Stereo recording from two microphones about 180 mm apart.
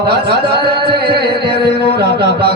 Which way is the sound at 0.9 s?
60° right (ahead or behind).